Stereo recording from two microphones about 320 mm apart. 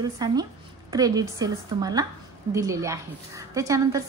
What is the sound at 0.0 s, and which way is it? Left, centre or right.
A woman's voice, centre.